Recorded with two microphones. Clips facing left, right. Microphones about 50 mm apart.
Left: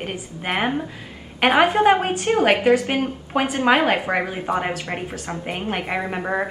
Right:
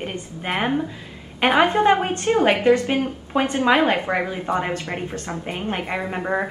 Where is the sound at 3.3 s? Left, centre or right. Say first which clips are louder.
Even; centre.